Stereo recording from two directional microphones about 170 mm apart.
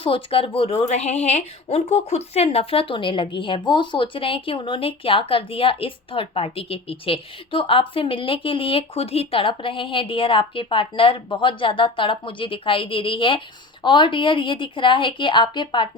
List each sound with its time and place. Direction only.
0.0 s a woman's voice: 30° left (ahead or behind)